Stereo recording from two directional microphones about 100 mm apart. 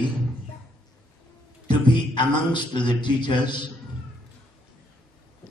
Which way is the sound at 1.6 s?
50° left (ahead or behind).